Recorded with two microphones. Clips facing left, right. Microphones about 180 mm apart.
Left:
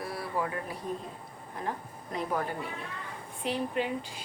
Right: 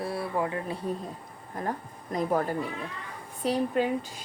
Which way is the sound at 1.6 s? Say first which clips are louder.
Right 3 dB; 45° right (ahead or behind).